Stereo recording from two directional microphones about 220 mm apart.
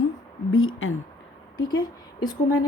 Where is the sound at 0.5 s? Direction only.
65° left (ahead or behind).